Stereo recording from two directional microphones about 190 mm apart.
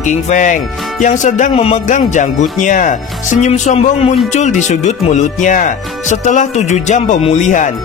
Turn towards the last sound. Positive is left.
turn(degrees=40)  # may be behind; listen again after turning